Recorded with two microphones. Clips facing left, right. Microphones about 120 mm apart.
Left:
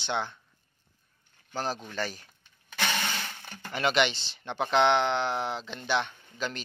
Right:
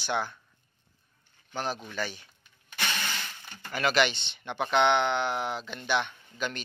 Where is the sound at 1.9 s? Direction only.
35° left (ahead or behind).